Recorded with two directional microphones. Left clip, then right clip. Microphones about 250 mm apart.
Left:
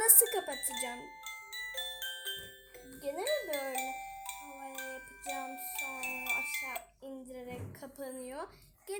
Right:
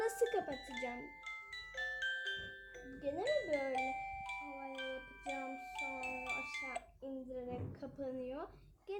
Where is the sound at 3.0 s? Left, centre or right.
Centre.